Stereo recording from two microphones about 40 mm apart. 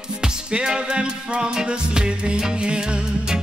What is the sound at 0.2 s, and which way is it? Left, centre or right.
Music, centre.